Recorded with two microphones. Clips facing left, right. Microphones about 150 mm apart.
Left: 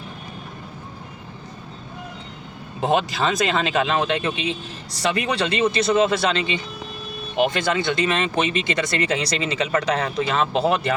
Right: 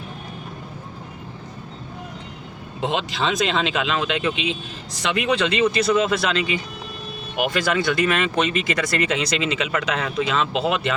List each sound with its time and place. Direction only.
2.8 s speech: 45° left (ahead or behind)
4.4 s speech: 90° right
5.1 s speech: 35° left (ahead or behind)